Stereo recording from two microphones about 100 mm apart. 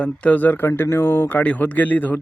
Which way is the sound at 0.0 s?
15° left (ahead or behind).